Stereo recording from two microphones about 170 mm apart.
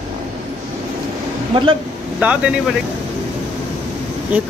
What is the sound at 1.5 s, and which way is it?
Speech, 30° right (ahead or behind).